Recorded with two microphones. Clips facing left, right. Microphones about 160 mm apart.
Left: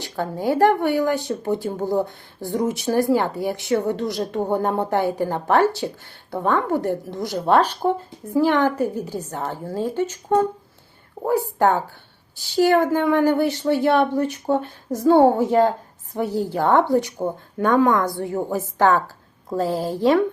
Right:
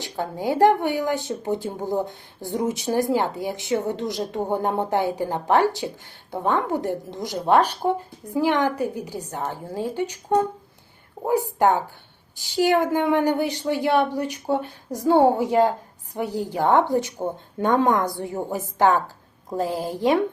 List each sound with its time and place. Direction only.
0.0 s a woman's voice: 15° right (ahead or behind)